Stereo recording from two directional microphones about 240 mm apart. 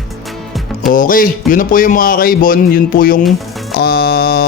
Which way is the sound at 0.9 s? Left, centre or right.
Left.